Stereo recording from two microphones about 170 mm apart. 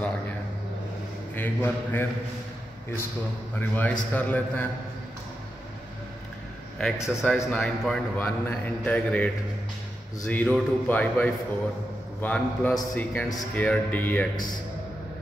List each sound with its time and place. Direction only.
1.3 s a man's voice: 10° left (ahead or behind)
3.5 s a man's voice: 10° left (ahead or behind)
6.8 s a man's voice: 5° left (ahead or behind)